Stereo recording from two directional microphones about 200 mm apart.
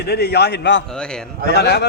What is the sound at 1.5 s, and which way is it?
Speech, 55° left (ahead or behind).